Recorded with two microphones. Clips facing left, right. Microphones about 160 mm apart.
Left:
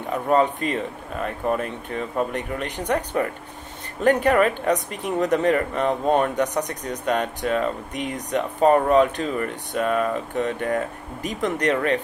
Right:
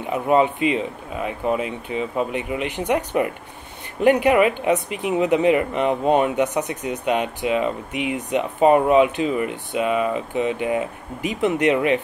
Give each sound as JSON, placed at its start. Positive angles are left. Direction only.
{"t": 0.0, "sound": "speech", "side_deg": -10}
{"t": 6.6, "sound": "speech", "side_deg": 40}
{"t": 7.1, "sound": "speech", "side_deg": -10}